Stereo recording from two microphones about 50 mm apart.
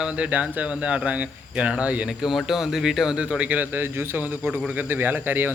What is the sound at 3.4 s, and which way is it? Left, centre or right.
Speech, right.